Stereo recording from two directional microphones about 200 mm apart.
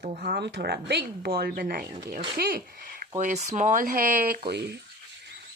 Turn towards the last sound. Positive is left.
turn(degrees=-55)  # may be behind; listen again after turning